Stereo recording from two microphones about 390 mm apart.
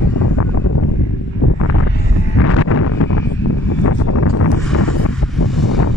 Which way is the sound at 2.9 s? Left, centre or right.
Left.